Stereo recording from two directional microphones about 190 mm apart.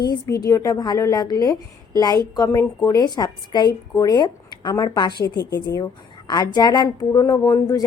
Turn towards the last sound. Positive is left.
turn(degrees=20)  # may be behind; listen again after turning